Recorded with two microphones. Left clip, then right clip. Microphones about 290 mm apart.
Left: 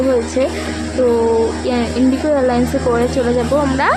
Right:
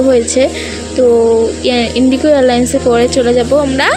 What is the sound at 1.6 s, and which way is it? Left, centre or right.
A woman's voice, right.